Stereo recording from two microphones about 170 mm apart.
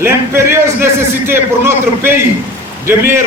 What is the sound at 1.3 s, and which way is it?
A man's voice, 15° right (ahead or behind).